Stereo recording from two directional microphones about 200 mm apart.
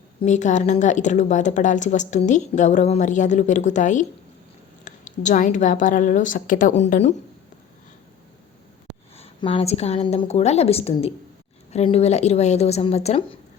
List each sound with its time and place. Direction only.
0.2 s a woman's voice: 35° left (ahead or behind)
9.1 s a woman's voice: 30° left (ahead or behind)